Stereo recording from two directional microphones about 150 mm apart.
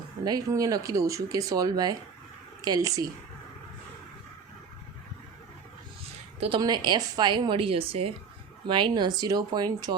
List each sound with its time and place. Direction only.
0.3 s speech: 25° right (ahead or behind)
6.6 s speech: 25° right (ahead or behind)